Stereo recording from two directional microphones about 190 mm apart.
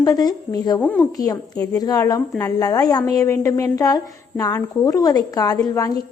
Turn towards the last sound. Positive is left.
turn(degrees=15)  # may be behind; listen again after turning